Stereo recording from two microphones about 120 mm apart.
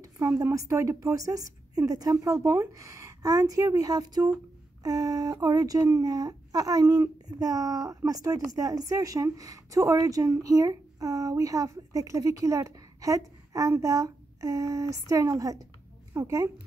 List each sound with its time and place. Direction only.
0.0 s speech: 25° right (ahead or behind)